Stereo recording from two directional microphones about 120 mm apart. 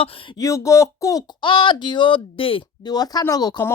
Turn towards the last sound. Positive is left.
turn(degrees=35)  # may be behind; listen again after turning